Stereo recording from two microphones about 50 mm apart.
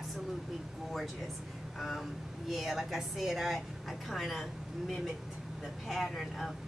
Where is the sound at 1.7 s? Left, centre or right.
Centre.